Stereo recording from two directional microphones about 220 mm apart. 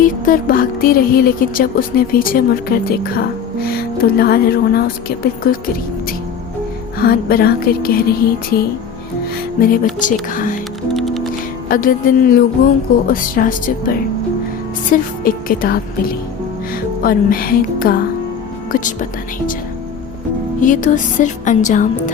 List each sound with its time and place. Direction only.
0.0 s speech: 40° left (ahead or behind)
7.0 s speech: 45° left (ahead or behind)
9.6 s speech: 40° left (ahead or behind)
10.9 s music: centre (ahead or behind)
11.7 s speech: 40° left (ahead or behind)
20.6 s speech: 35° left (ahead or behind)